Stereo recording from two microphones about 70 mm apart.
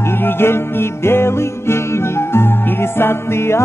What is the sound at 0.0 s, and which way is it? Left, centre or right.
Music, left.